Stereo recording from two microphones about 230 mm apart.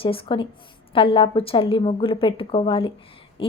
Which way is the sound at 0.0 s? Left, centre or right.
Left.